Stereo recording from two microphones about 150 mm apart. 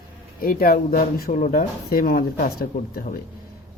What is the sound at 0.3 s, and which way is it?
Speech, 75° left (ahead or behind).